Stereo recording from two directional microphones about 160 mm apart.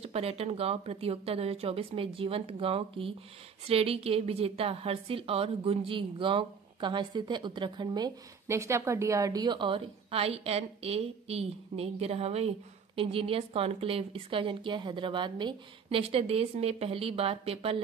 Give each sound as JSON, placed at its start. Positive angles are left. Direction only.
{"t": 0.0, "sound": "a woman's voice", "side_deg": -40}